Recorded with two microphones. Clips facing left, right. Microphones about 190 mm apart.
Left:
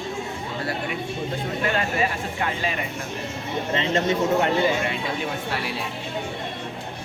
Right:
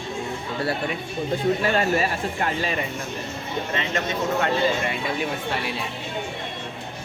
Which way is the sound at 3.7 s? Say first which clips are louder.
Left 6 dB; 25° left (ahead or behind).